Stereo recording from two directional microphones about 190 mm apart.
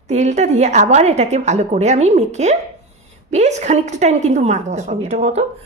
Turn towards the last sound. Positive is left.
turn(degrees=-35)  # may be behind; listen again after turning